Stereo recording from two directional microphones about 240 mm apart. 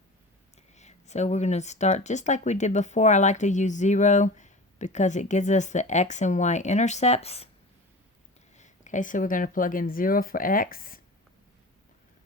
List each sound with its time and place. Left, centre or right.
0.7 s speech: left
8.5 s speech: left